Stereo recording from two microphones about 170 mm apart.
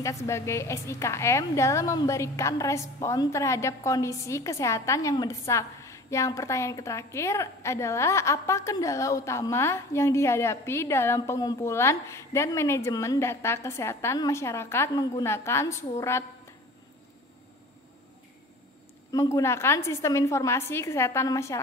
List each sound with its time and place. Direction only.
0.0 s a woman's voice: 20° left (ahead or behind)
19.1 s a woman's voice: 20° left (ahead or behind)